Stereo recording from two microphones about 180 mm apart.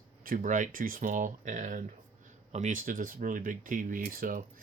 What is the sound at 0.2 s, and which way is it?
Speech, 50° right (ahead or behind).